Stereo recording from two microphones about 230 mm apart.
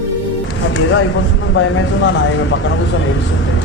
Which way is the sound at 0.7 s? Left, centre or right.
Left.